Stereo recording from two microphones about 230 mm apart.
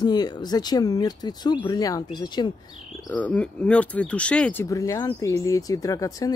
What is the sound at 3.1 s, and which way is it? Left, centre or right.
Speech, centre.